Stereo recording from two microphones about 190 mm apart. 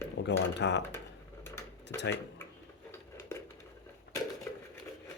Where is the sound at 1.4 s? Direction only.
15° left (ahead or behind).